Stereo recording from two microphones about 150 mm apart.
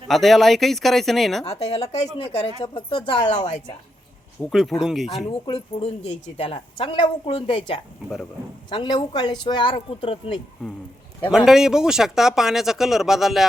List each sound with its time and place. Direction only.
0.1 s speech: centre (ahead or behind)
1.5 s a woman's voice: 45° left (ahead or behind)
3.2 s a woman's voice: 50° left (ahead or behind)
4.4 s speech: centre (ahead or behind)
5.5 s a woman's voice: 45° left (ahead or behind)
11.3 s speech: 5° right (ahead or behind)